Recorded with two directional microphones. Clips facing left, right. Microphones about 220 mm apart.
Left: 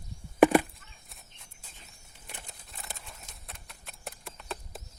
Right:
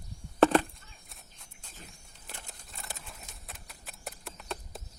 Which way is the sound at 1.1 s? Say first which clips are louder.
Even; centre (ahead or behind).